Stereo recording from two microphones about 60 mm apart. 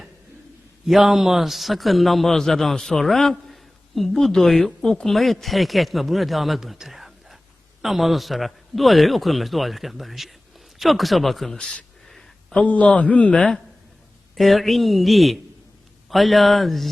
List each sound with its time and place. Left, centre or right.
0.9 s a man's voice: centre
12.1 s a sound: centre
12.6 s a man's voice: left
14.3 s a man's voice: centre